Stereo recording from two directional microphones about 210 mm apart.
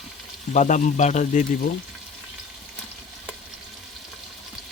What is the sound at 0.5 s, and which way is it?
Speech, 35° left (ahead or behind).